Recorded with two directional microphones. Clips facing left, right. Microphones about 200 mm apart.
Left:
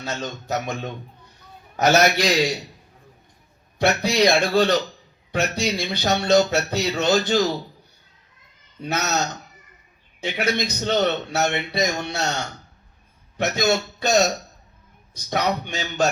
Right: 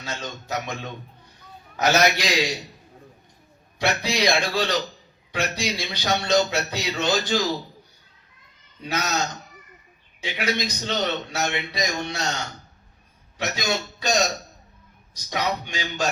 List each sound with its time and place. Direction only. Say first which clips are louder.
0.0 s speech: left 4 dB; 45° left (ahead or behind)
3.8 s speech: left 5 dB; 45° left (ahead or behind)
8.8 s speech: left 2 dB; 50° left (ahead or behind)
10.2 s speech: left 3 dB; 50° left (ahead or behind)
13.4 s speech: left 6 dB; 50° left (ahead or behind)
15.3 s speech: left 3 dB; 50° left (ahead or behind)